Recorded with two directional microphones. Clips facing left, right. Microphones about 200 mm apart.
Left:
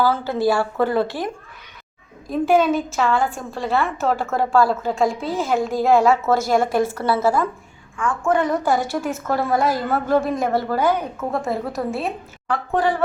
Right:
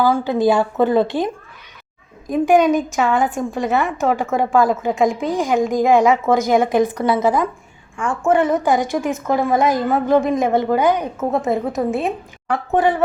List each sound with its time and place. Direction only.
0.0 s a woman's voice: 15° right (ahead or behind)